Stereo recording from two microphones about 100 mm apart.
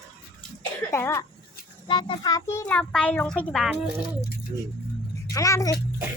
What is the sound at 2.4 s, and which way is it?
Child singing, 25° left (ahead or behind).